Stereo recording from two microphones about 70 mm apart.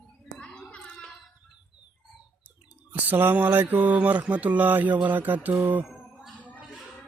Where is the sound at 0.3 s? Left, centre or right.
Centre.